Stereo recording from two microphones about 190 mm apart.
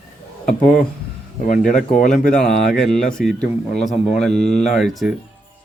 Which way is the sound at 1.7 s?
40° left (ahead or behind).